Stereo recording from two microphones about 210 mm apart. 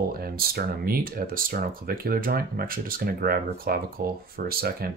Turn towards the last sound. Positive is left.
turn(degrees=-45)  # may be behind; listen again after turning